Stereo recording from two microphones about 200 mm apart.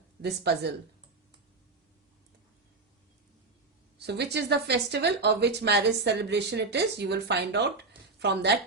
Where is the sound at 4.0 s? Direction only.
55° right (ahead or behind).